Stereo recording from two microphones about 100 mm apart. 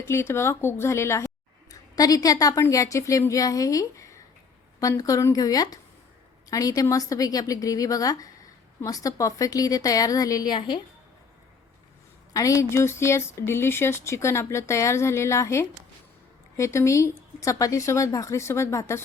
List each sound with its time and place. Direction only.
0.0 s speech: 25° left (ahead or behind)
2.0 s speech: 35° left (ahead or behind)
12.3 s speech: 35° left (ahead or behind)